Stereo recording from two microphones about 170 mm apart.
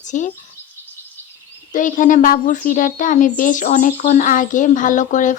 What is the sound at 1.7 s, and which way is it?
Speech, 50° left (ahead or behind).